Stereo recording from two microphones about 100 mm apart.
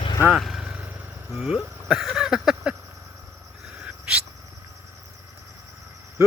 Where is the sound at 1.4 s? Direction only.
Centre (ahead or behind).